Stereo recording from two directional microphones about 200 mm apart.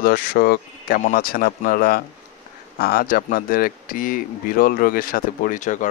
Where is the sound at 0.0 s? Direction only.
45° left (ahead or behind).